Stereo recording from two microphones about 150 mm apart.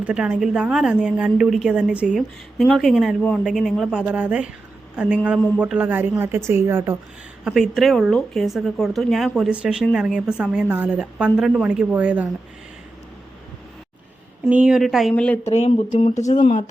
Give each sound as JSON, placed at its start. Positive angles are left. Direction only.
{"t": 0.0, "sound": "a woman's voice", "side_deg": -5}
{"t": 7.4, "sound": "a woman's voice", "side_deg": 0}
{"t": 14.4, "sound": "a woman's voice", "side_deg": -5}
{"t": 15.1, "sound": "speech", "side_deg": 10}
{"t": 15.4, "sound": "speech", "side_deg": 45}